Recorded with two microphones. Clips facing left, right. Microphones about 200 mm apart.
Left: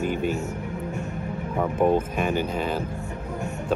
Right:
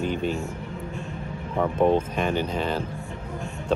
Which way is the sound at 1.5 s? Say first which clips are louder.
Right 1 dB; 10° left (ahead or behind).